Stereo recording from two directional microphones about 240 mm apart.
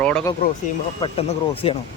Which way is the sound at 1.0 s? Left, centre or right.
Left.